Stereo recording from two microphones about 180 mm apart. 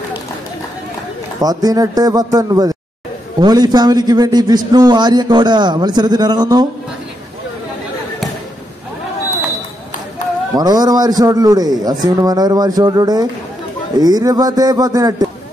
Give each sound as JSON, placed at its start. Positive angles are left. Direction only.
{"t": 1.4, "sound": "a man's voice", "side_deg": -20}
{"t": 10.5, "sound": "a man's voice", "side_deg": -20}